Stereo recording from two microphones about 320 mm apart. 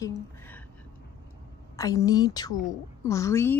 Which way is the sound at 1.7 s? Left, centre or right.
Centre.